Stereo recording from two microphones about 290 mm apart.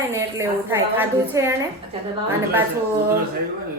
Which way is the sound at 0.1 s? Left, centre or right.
Centre.